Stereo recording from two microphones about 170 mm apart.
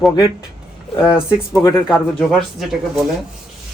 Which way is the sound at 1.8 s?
Centre (ahead or behind).